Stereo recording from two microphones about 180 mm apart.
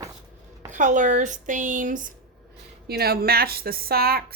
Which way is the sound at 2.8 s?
60° right (ahead or behind).